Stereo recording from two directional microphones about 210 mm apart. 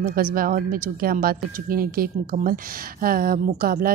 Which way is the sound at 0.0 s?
40° right (ahead or behind).